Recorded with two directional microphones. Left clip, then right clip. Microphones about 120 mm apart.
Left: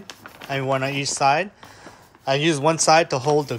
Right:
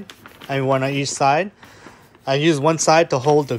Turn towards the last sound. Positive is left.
turn(degrees=20)  # may be behind; listen again after turning